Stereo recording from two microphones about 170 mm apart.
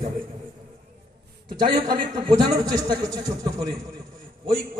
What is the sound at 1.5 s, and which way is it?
Speech, 60° right (ahead or behind).